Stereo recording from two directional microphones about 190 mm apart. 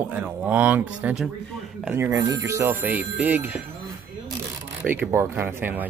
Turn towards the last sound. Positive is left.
turn(degrees=-10)  # may be behind; listen again after turning